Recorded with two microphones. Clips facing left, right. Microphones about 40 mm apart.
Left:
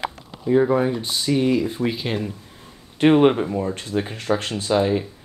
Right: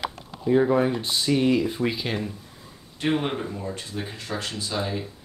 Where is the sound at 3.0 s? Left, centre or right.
Left.